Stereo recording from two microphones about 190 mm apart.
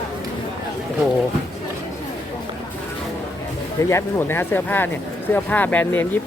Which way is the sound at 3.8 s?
15° left (ahead or behind).